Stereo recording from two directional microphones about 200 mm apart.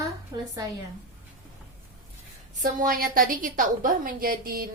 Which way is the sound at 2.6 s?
45° right (ahead or behind).